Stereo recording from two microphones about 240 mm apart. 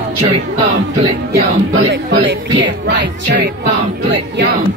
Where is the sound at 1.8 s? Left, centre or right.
Right.